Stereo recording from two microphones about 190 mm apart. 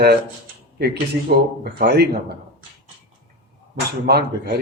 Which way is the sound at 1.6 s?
55° right (ahead or behind).